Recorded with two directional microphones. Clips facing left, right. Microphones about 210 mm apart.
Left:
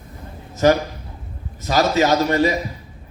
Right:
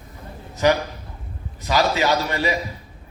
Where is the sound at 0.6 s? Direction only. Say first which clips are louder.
Left 3 dB; 45° left (ahead or behind).